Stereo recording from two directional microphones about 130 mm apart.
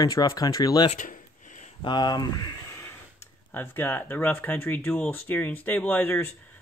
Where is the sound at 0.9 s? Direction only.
75° left (ahead or behind).